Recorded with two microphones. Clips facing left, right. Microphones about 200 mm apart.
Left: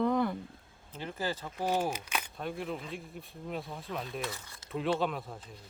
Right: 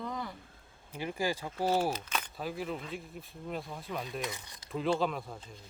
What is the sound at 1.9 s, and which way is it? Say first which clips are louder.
Speech: right 1 dB; 10° left (ahead or behind).